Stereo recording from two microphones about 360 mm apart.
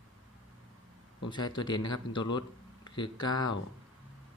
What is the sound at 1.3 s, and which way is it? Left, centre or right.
Speech, centre.